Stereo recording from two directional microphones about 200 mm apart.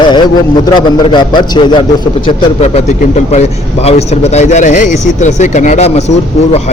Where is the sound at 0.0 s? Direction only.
25° left (ahead or behind).